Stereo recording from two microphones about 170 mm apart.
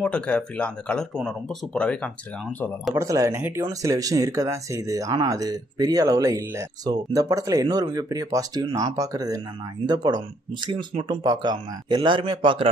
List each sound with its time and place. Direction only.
0.0 s speech: 5° left (ahead or behind)
2.9 s speech: 20° right (ahead or behind)